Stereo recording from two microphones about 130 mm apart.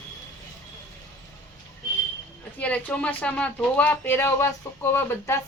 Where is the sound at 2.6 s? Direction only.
10° left (ahead or behind).